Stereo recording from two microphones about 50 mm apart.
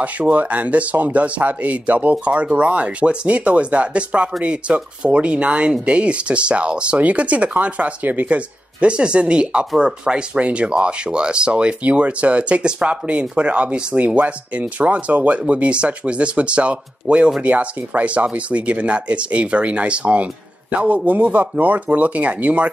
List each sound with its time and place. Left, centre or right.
0.0 s speech: right
8.8 s speech: right